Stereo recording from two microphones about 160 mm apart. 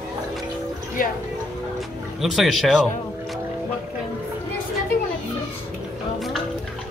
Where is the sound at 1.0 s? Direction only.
60° left (ahead or behind).